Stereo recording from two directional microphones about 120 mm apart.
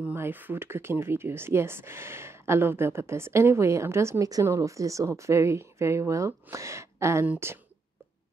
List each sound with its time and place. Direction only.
0.0 s speech: 15° right (ahead or behind)